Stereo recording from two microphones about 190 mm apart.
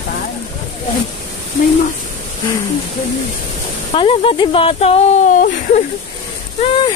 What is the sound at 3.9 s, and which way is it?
Speech, 25° left (ahead or behind).